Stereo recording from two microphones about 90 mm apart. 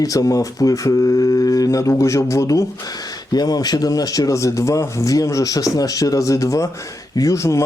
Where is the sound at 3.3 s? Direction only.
45° left (ahead or behind).